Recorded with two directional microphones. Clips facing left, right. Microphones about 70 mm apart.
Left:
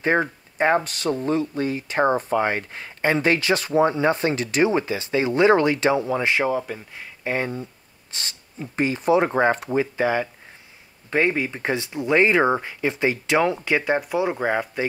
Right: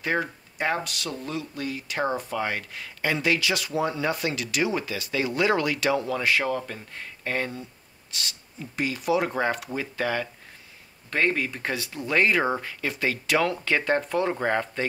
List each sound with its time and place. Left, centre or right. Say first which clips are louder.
0.0 s speech: left 6 dB; left
8.1 s speech: even; left; by 14.9 s centre